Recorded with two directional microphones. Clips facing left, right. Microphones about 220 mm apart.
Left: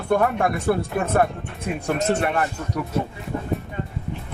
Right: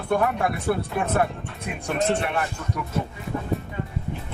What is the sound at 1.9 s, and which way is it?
Speech, 45° left (ahead or behind).